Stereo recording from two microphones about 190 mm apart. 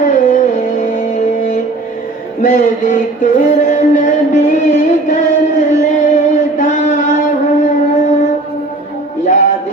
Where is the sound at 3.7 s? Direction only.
40° left (ahead or behind).